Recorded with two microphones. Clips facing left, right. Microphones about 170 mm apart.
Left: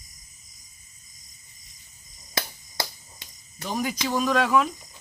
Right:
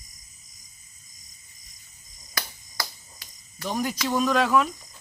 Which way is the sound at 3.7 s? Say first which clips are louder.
Right 1 dB; centre (ahead or behind).